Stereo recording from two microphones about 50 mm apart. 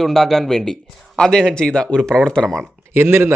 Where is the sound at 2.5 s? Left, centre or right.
Right.